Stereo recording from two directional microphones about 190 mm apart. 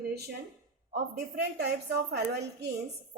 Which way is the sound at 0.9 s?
60° right (ahead or behind).